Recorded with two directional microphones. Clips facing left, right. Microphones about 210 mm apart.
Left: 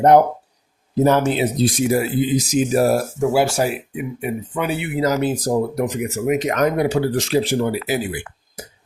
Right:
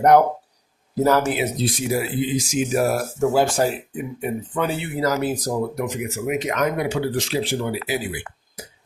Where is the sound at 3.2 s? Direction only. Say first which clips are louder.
Right 2 dB; 10° left (ahead or behind); by 7.7 s 45° left (ahead or behind).